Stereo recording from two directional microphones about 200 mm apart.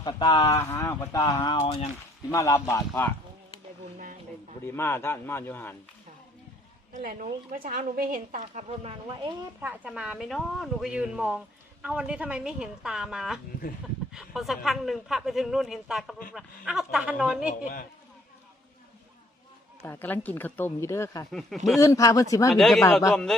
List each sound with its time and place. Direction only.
0.0 s a woman's voice: 20° left (ahead or behind)
1.6 s speech: 30° left (ahead or behind)
2.3 s a woman's voice: 15° left (ahead or behind)
4.6 s a woman's voice: 10° left (ahead or behind)
6.9 s a woman's voice: 40° right (ahead or behind)
9.6 s a man's voice: 5° right (ahead or behind)
19.8 s a woman's voice: 10° left (ahead or behind)
22.5 s a man's voice: centre (ahead or behind)